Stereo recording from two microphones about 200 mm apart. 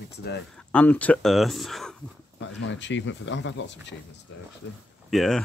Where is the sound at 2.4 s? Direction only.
65° left (ahead or behind).